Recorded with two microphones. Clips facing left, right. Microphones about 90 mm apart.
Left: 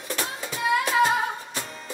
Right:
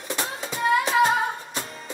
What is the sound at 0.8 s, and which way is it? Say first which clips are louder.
Music: even; centre (ahead or behind).